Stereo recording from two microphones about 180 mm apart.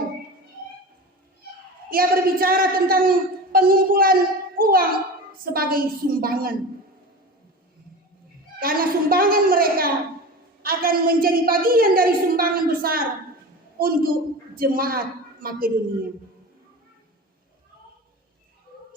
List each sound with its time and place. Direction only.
1.9 s a man's voice: 55° right (ahead or behind)
8.6 s a man's voice: 55° right (ahead or behind)